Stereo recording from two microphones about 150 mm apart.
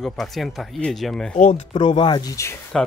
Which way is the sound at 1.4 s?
55° left (ahead or behind).